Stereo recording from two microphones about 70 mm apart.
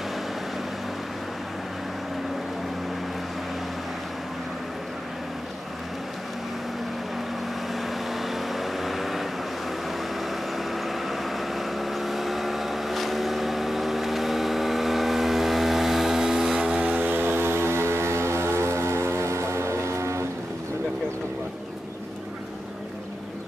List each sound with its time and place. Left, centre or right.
7.8 s vehicle: centre
10.7 s vehicle: centre
16.8 s a sound: right